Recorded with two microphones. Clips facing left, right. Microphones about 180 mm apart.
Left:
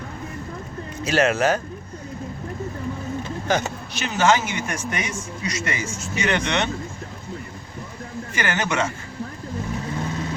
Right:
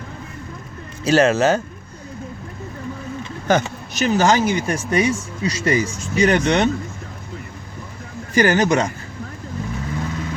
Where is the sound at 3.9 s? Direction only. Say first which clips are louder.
Right 4 dB; 40° right (ahead or behind).